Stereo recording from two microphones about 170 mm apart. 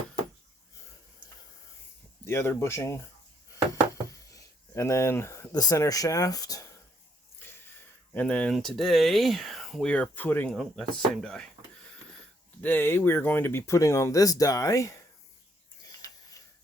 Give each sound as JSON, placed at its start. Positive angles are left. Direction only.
{"t": 2.2, "sound": "speech", "side_deg": 15}
{"t": 4.3, "sound": "speech", "side_deg": 20}
{"t": 7.3, "sound": "a sound", "side_deg": 15}
{"t": 8.1, "sound": "speech", "side_deg": 10}
{"t": 12.6, "sound": "speech", "side_deg": 10}